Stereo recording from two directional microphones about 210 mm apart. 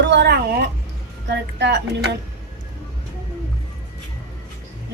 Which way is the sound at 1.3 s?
55° right (ahead or behind).